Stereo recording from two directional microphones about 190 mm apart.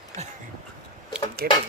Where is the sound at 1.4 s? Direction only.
50° right (ahead or behind).